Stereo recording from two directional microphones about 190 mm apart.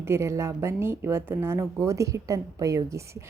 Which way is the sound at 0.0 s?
15° right (ahead or behind).